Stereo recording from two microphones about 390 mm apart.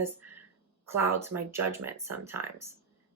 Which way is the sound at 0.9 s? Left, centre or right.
Centre.